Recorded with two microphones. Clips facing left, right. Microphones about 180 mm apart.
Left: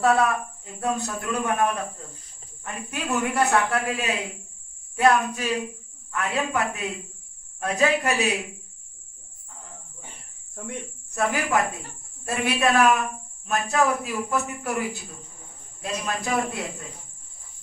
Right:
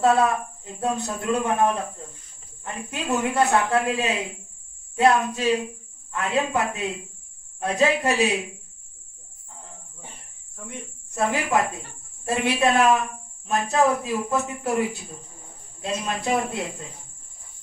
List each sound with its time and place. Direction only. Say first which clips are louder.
0.0 s speech: right 1 dB; 25° right (ahead or behind)
11.1 s speech: right 1 dB; 25° right (ahead or behind)